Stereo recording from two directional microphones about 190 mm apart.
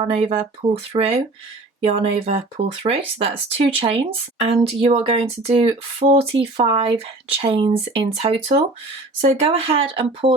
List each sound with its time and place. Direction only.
0.0 s speech: 30° right (ahead or behind)